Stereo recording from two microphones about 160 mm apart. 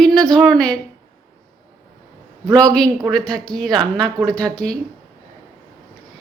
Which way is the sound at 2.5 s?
20° right (ahead or behind).